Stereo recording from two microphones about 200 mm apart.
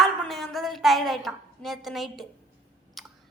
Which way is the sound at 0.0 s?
Centre (ahead or behind).